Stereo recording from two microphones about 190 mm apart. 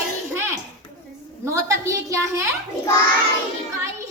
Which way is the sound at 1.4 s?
15° right (ahead or behind).